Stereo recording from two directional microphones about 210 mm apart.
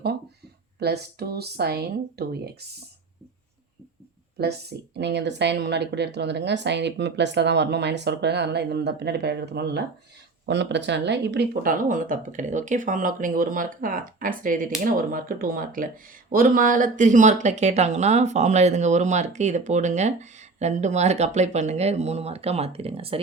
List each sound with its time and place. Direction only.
0.8 s speech: 50° right (ahead or behind)
4.4 s speech: 50° right (ahead or behind); by 23.2 s 25° right (ahead or behind)